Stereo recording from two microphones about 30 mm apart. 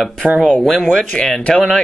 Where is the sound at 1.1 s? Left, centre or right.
Left.